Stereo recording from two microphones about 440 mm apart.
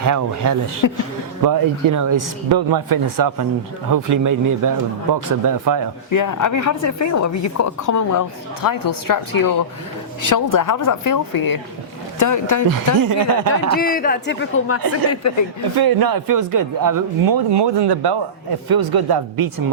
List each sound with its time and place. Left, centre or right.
0.0 s speech: right
0.8 s speech: left
1.5 s speech: right
6.1 s a woman's voice: left
12.2 s a woman's voice: left
12.7 s speech: right
13.7 s speech: centre; by 15.4 s left
15.7 s speech: right